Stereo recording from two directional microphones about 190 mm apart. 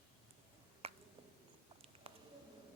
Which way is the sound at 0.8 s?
30° right (ahead or behind).